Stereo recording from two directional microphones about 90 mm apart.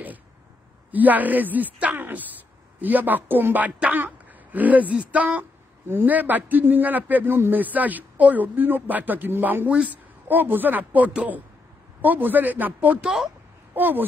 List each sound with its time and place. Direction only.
0.9 s a woman's voice: 20° right (ahead or behind)